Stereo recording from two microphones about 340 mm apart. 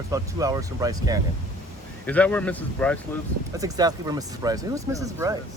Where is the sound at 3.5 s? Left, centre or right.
Centre.